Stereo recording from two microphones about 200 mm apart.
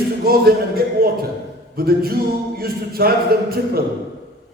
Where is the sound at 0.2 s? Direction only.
50° right (ahead or behind).